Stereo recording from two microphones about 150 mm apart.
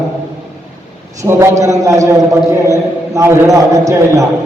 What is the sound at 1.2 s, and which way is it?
A man's voice, 20° right (ahead or behind).